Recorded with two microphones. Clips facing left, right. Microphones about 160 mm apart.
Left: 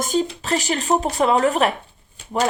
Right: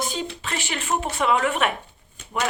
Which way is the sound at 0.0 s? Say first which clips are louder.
Left 7 dB; 40° left (ahead or behind).